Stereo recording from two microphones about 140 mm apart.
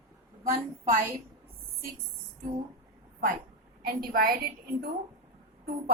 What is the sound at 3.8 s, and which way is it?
Speech, 90° right.